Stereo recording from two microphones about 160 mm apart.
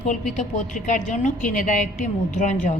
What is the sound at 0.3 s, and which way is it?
A woman's voice, 50° left (ahead or behind).